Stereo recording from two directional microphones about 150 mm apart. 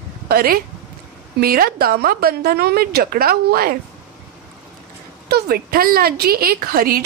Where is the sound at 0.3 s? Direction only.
80° right.